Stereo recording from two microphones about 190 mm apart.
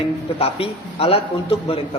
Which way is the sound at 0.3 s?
30° left (ahead or behind).